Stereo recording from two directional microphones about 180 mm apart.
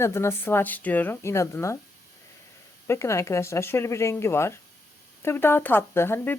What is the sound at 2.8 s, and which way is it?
Speech, 15° left (ahead or behind).